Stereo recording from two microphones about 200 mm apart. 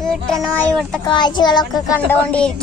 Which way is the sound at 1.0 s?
20° left (ahead or behind).